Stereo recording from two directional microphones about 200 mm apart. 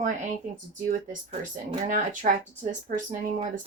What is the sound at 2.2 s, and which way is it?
Speech, 40° right (ahead or behind).